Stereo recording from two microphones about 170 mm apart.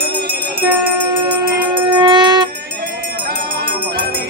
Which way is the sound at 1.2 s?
25° right (ahead or behind).